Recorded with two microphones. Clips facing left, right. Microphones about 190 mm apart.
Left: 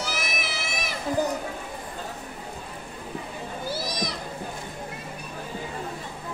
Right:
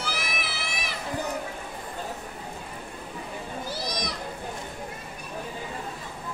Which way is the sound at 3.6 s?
5° left (ahead or behind).